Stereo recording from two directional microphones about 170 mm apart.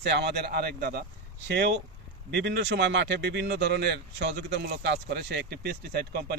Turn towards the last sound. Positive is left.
turn(degrees=-70)  # may be behind; listen again after turning